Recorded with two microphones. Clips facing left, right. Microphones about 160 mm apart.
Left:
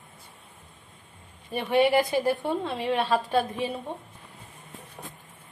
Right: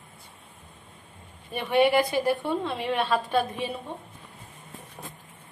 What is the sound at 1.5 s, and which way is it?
A woman's voice, 35° left (ahead or behind).